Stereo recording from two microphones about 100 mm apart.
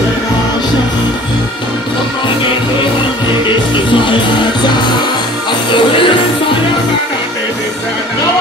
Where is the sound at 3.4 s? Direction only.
55° left (ahead or behind).